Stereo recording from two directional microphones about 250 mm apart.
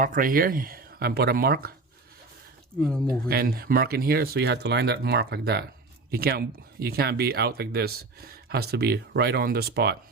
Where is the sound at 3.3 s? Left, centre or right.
Right.